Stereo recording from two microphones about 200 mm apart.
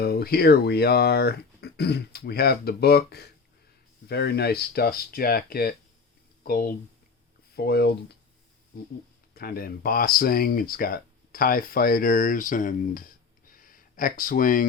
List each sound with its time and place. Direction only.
0.0 s speech: 50° left (ahead or behind)
9.3 s speech: 50° left (ahead or behind)
13.5 s a sound: 45° left (ahead or behind)